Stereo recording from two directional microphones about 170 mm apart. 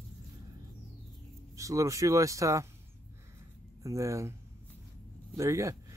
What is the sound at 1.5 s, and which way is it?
Speech, 20° right (ahead or behind).